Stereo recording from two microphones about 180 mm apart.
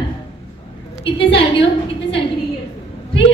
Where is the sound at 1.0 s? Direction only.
30° left (ahead or behind).